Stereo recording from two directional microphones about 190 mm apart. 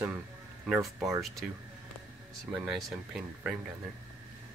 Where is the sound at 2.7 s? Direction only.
5° right (ahead or behind).